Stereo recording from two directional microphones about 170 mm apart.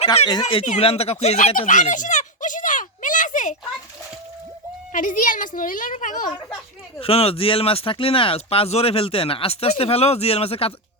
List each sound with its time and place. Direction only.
0.4 s a sound: 40° left (ahead or behind)
4.9 s a woman's voice: 50° left (ahead or behind)
7.0 s speech: 35° left (ahead or behind)